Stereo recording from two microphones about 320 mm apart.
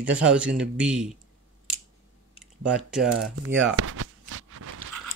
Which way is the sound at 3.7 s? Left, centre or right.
Right.